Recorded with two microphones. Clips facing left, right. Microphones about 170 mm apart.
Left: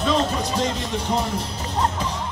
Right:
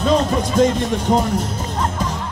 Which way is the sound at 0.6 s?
50° right (ahead or behind).